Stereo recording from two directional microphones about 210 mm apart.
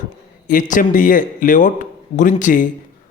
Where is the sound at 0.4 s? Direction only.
40° left (ahead or behind).